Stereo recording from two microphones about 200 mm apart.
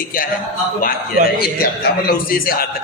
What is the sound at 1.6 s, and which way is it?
Speech, 45° left (ahead or behind).